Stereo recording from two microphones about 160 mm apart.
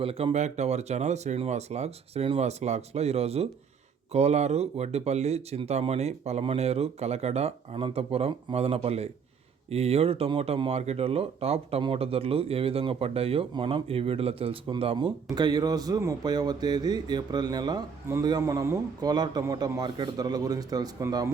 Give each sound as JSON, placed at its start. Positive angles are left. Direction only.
{"t": 0.0, "sound": "speech", "side_deg": -35}